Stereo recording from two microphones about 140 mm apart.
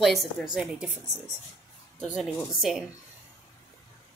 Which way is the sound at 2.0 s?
5° right (ahead or behind).